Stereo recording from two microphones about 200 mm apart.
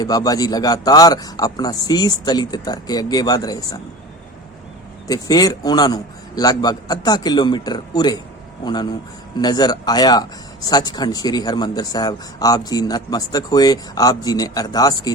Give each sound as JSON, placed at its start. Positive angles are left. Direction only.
{"t": 0.0, "sound": "speech", "side_deg": 20}
{"t": 5.0, "sound": "speech", "side_deg": 20}